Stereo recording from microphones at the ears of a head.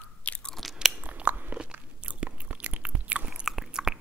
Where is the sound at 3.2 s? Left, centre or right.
Centre.